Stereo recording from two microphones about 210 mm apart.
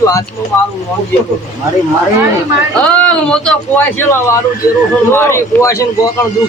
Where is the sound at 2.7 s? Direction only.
5° left (ahead or behind).